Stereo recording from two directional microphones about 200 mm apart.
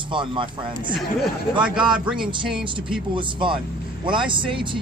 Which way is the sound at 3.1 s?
25° right (ahead or behind).